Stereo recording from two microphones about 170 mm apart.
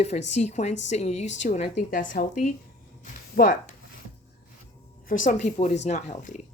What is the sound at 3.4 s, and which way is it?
Speech, 60° left (ahead or behind).